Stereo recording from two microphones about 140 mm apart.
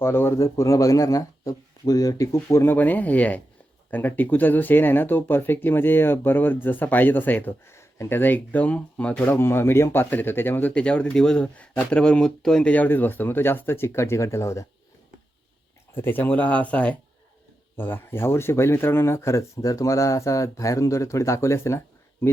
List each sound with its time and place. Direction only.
0.0 s speech: 15° left (ahead or behind)
16.0 s speech: 15° left (ahead or behind)